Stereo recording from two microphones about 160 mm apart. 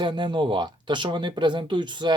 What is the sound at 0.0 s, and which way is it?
Speech, 30° right (ahead or behind).